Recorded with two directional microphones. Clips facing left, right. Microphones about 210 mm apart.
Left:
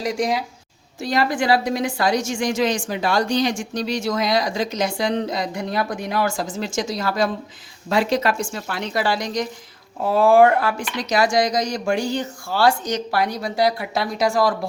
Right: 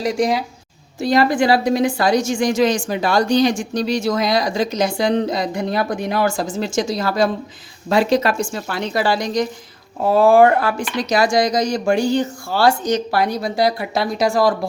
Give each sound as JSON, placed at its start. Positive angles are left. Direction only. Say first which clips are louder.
{"t": 0.0, "sound": "a woman's voice", "louder": "right 4 dB", "side_deg": -30}